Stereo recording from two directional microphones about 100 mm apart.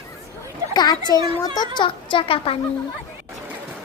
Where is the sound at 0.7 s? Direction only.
40° left (ahead or behind).